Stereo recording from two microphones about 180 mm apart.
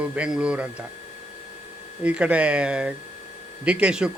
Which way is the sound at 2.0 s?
5° right (ahead or behind).